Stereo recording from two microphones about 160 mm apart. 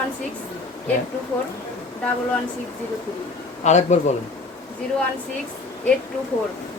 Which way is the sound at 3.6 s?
45° left (ahead or behind).